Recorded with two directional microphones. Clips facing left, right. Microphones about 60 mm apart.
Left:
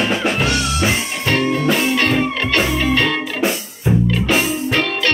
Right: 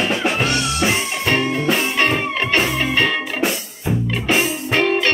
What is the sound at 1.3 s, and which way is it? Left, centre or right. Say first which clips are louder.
Music: left 3 dB; centre.